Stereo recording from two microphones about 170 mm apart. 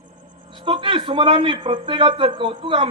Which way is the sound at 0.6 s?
30° right (ahead or behind).